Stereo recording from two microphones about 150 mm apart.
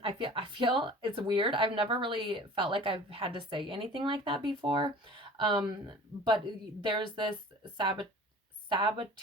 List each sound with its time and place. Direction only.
0.0 s speech: 35° right (ahead or behind)